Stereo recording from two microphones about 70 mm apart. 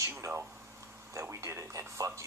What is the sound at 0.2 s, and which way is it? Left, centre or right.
Speech, right.